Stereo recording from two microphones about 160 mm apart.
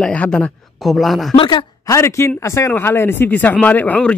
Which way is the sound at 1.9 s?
15° left (ahead or behind).